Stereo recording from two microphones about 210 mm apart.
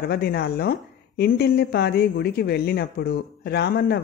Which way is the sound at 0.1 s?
50° left (ahead or behind).